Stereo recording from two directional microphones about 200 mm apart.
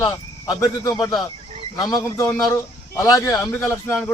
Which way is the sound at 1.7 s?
20° left (ahead or behind).